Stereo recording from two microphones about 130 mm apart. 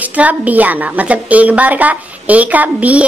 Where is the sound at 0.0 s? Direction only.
10° right (ahead or behind).